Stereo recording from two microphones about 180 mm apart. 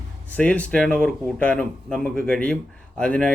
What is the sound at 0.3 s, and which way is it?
Speech, 10° left (ahead or behind).